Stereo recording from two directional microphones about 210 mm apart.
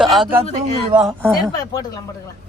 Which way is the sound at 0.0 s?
Centre (ahead or behind).